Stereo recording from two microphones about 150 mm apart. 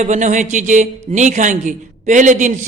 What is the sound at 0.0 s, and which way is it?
A man's voice, 50° right (ahead or behind).